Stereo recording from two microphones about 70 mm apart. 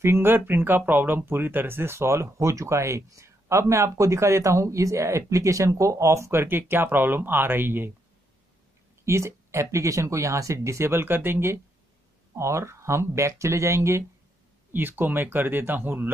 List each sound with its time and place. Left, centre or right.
0.0 s speech: right
9.0 s speech: right
14.7 s speech: right